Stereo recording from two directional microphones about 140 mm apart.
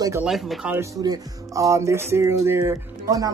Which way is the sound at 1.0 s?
25° right (ahead or behind).